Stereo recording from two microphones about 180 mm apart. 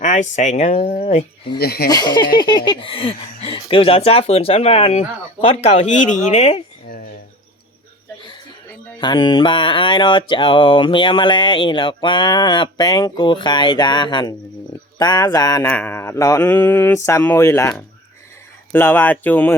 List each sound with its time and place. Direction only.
0.0 s speech: 40° left (ahead or behind)
1.5 s speech: 60° left (ahead or behind)
1.9 s mantra: 20° left (ahead or behind)
5.5 s speech: 35° left (ahead or behind)
9.0 s mantra: 25° left (ahead or behind); by 19.5 s 10° left (ahead or behind)